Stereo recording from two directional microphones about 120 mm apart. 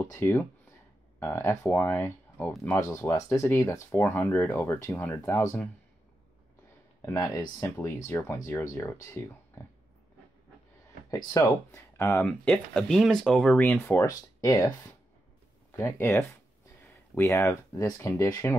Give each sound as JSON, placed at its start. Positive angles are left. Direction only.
{"t": 0.0, "sound": "speech", "side_deg": 20}
{"t": 7.0, "sound": "speech", "side_deg": 25}
{"t": 11.1, "sound": "speech", "side_deg": 35}
{"t": 12.3, "sound": "speech", "side_deg": 5}